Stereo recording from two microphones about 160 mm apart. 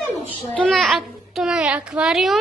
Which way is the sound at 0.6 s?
Centre (ahead or behind).